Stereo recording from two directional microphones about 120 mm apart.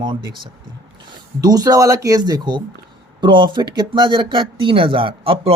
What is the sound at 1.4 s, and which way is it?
Speech, 30° right (ahead or behind).